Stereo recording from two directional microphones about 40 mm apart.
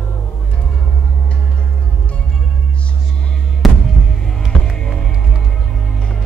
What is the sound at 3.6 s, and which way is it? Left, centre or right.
Music, centre.